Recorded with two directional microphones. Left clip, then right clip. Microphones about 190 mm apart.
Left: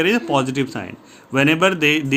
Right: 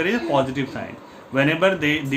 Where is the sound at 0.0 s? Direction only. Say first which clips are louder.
Left 2 dB; 55° left (ahead or behind).